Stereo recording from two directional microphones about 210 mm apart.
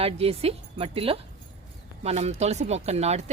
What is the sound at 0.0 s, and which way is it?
Speech, 30° right (ahead or behind).